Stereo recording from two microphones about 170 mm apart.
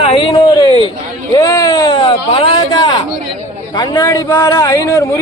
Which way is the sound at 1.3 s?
20° left (ahead or behind).